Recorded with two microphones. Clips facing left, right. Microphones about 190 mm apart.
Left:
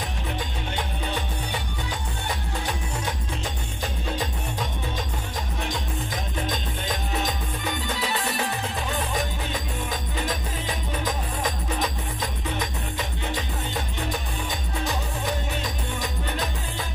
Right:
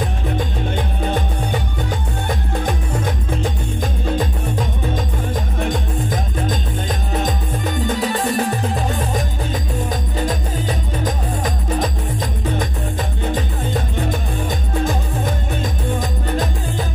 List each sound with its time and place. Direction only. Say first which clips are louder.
0.7 s music: right 7 dB; 50° right (ahead or behind)
7.8 s music: right 11 dB; 45° right (ahead or behind)